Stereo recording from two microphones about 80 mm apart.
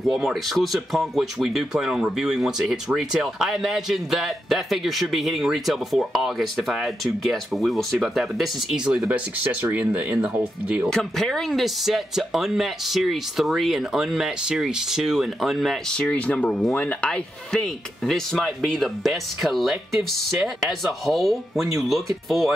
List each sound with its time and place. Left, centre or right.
0.0 s speech: centre
9.1 s speech: centre
10.9 s speech: centre
15.9 s speech: centre